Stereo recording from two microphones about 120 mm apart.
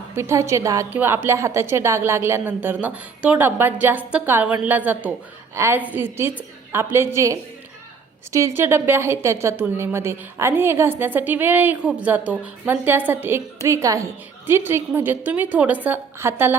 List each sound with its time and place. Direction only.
0.2 s speech: 25° right (ahead or behind)
0.9 s a woman's voice: 15° right (ahead or behind)